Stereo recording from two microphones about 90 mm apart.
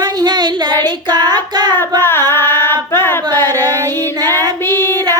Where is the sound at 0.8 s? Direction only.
50° right (ahead or behind).